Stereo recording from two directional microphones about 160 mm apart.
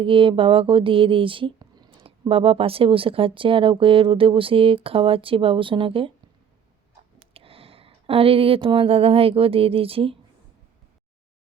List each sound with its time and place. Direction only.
0.0 s speech: 35° right (ahead or behind)
7.3 s speech: 35° right (ahead or behind)